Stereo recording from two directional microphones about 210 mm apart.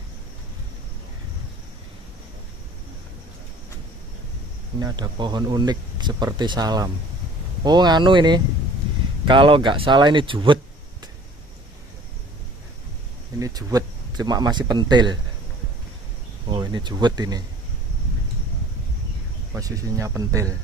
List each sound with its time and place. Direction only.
4.7 s speech: 20° right (ahead or behind)
13.4 s speech: 15° right (ahead or behind)
16.4 s speech: 20° right (ahead or behind)
19.5 s speech: 15° right (ahead or behind)